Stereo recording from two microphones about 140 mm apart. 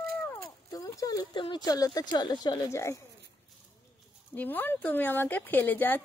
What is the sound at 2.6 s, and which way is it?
Speech, 20° left (ahead or behind).